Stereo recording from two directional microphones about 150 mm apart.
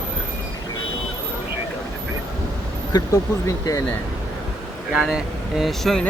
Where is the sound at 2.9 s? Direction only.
25° left (ahead or behind).